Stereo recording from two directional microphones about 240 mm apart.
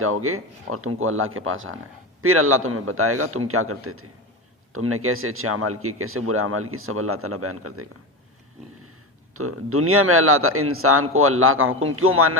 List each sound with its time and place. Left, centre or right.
0.0 s speech: right
9.3 s speech: right